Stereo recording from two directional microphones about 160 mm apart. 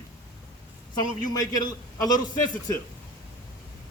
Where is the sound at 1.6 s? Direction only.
25° left (ahead or behind).